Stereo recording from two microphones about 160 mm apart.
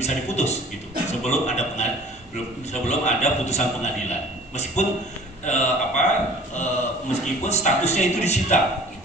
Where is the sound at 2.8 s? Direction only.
45° left (ahead or behind).